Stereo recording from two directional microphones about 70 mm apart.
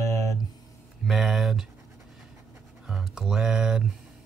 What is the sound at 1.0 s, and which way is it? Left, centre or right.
Speech, centre.